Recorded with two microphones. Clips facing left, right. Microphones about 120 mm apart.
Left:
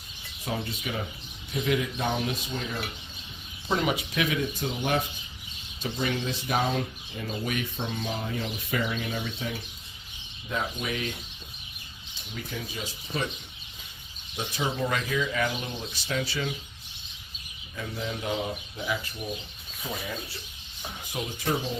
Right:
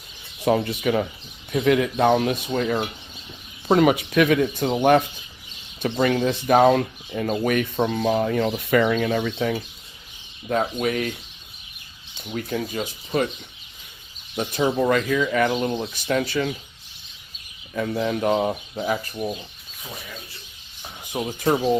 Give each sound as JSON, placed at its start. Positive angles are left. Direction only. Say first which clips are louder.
{"t": 0.4, "sound": "speech", "louder": "right 12 dB", "side_deg": -75}
{"t": 1.5, "sound": "speech", "louder": "right 8 dB", "side_deg": -65}
{"t": 10.5, "sound": "speech", "louder": "right 9 dB", "side_deg": -55}
{"t": 12.3, "sound": "speech", "louder": "right 10 dB", "side_deg": -55}
{"t": 14.3, "sound": "speech", "louder": "right 8 dB", "side_deg": -55}
{"t": 17.7, "sound": "speech", "louder": "right 10 dB", "side_deg": -60}
{"t": 21.3, "sound": "speech", "louder": "right 10 dB", "side_deg": -60}